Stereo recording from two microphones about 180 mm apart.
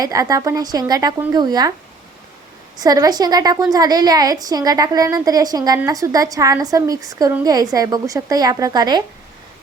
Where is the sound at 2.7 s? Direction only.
20° right (ahead or behind).